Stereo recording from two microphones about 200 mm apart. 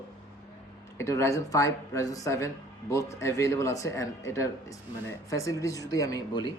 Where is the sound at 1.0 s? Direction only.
15° left (ahead or behind).